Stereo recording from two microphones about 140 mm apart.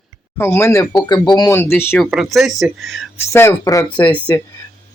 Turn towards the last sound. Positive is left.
turn(degrees=25)  # may be behind; listen again after turning